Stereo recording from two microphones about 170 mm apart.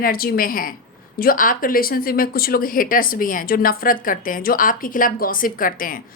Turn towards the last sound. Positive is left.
turn(degrees=55)  # may be behind; listen again after turning